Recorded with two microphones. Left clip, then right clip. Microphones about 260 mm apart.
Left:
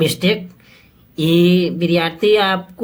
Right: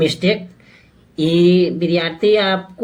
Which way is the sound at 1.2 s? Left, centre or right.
Left.